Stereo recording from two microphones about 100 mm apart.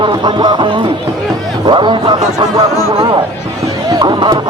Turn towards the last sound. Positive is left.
turn(degrees=-45)  # may be behind; listen again after turning